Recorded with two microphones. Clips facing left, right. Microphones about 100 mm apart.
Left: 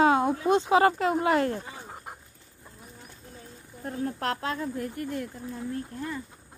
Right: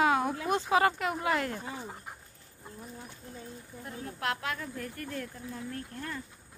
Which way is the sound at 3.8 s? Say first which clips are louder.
Left 5 dB; 40° left (ahead or behind).